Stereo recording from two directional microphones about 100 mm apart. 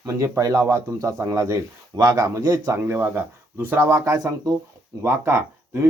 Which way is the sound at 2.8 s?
20° right (ahead or behind).